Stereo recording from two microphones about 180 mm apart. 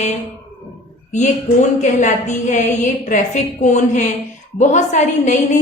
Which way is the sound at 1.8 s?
40° left (ahead or behind).